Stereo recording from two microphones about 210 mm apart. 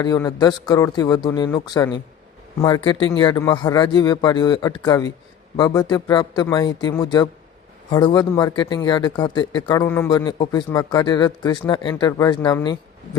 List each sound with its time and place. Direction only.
0.0 s speech: 20° left (ahead or behind)